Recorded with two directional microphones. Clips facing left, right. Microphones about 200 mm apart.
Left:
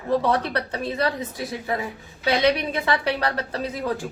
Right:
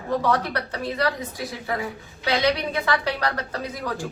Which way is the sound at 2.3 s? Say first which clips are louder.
Left 2 dB; 25° left (ahead or behind).